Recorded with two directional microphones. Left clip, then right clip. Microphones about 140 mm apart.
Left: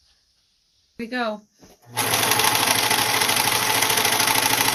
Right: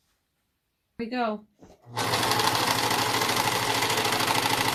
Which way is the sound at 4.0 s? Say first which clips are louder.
Left 5 dB; 10° left (ahead or behind).